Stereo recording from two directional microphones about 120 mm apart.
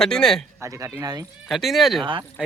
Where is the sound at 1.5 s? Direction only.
Centre (ahead or behind).